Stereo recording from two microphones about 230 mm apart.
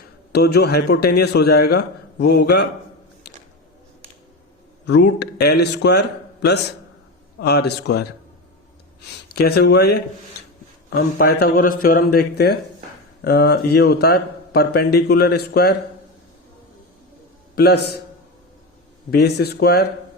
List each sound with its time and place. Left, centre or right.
0.3 s speech: left
4.9 s speech: left
9.3 s speech: left
17.5 s a man's voice: left
19.1 s speech: left